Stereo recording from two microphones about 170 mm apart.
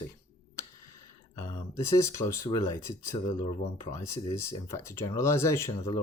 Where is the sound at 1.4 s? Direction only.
20° left (ahead or behind).